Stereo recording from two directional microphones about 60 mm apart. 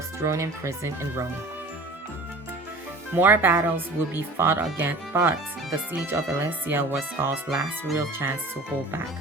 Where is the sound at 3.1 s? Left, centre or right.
Right.